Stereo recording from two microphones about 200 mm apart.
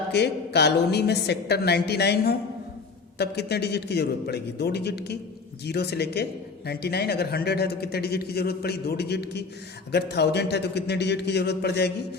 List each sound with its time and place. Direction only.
0.1 s a woman's voice: 55° left (ahead or behind)